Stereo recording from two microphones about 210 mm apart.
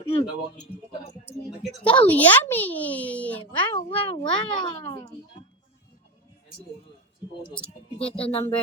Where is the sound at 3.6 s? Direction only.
25° left (ahead or behind).